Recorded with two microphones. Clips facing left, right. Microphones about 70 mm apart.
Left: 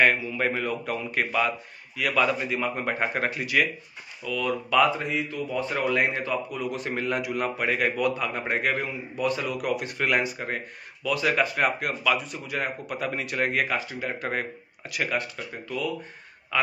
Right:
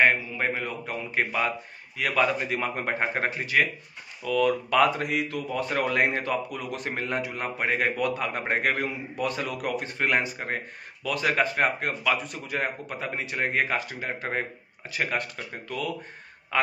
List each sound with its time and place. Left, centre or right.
0.0 s a man's voice: right
2.0 s speech: right
2.8 s speech: right
4.2 s a man's voice: right
5.0 s a man's voice: right
7.1 s speech: right
8.0 s a man's voice: right
13.0 s a man's voice: right
13.7 s speech: right
15.1 s a man's voice: right